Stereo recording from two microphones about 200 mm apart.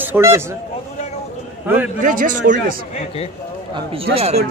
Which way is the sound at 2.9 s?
30° left (ahead or behind).